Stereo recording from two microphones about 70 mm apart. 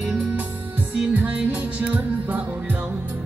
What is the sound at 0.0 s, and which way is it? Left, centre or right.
Music, centre.